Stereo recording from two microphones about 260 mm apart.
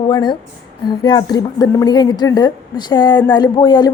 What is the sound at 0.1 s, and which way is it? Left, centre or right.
A woman's voice, centre.